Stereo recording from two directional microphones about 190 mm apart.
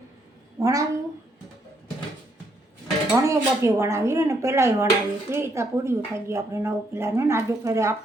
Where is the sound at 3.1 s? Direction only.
15° right (ahead or behind).